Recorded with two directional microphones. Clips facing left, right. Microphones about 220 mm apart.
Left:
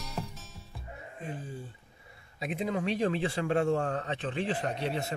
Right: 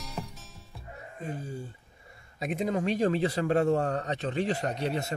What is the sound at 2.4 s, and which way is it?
Speech, 45° right (ahead or behind).